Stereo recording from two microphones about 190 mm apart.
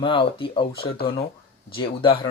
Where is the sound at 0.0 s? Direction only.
25° left (ahead or behind).